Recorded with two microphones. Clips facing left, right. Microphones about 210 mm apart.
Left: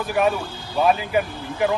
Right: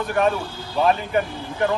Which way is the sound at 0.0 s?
5° left (ahead or behind).